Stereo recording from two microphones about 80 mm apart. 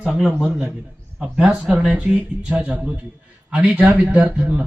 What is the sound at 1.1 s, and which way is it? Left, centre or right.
Speech, centre.